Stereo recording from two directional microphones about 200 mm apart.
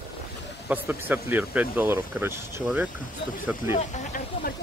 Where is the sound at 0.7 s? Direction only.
10° right (ahead or behind).